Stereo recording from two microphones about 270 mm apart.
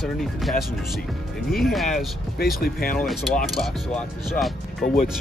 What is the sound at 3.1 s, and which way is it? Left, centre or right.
Speech, centre.